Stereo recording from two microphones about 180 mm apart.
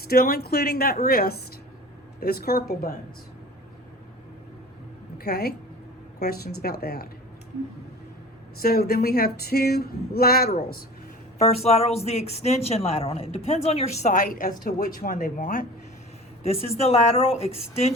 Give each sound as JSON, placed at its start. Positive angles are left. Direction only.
{"t": 0.1, "sound": "speech", "side_deg": 60}
{"t": 5.1, "sound": "a woman's voice", "side_deg": 60}
{"t": 8.6, "sound": "speech", "side_deg": 60}
{"t": 11.3, "sound": "speech", "side_deg": 35}
{"t": 16.4, "sound": "speech", "side_deg": 35}